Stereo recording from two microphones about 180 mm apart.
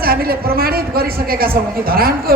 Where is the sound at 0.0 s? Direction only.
55° right (ahead or behind).